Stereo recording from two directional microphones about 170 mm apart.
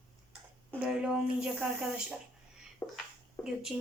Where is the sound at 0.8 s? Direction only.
5° right (ahead or behind).